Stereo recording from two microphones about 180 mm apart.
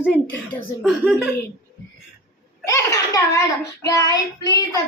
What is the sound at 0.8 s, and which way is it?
Speech, centre (ahead or behind).